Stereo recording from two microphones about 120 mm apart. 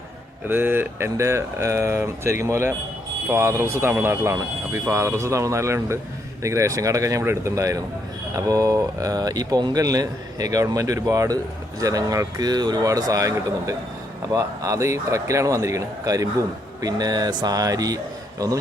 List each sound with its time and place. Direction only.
0.4 s speech: 15° right (ahead or behind)